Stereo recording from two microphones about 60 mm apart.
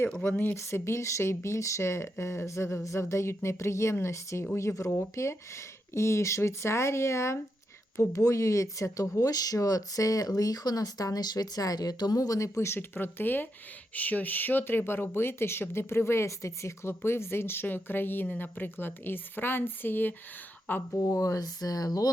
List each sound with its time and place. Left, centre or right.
0.3 s speech: left
0.5 s speech: left
12.5 s speech: left
12.9 s speech: left
21.0 s speech: left